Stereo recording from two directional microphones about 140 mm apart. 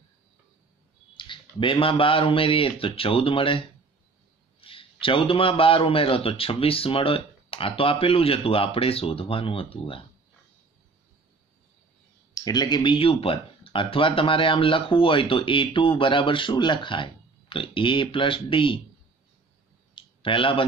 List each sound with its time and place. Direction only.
1.1 s speech: 35° left (ahead or behind)
12.4 s speech: 30° left (ahead or behind)
20.0 s clicking: 35° left (ahead or behind)